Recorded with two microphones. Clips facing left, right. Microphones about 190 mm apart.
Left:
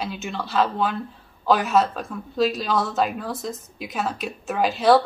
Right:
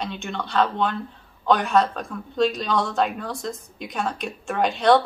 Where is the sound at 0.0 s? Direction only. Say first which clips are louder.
Even; 5° left (ahead or behind).